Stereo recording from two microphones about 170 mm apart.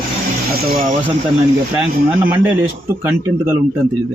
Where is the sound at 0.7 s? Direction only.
55° right (ahead or behind).